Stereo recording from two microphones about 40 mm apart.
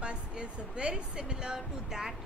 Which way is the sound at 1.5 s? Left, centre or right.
Centre.